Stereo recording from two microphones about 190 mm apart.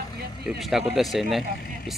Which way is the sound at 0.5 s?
Centre (ahead or behind).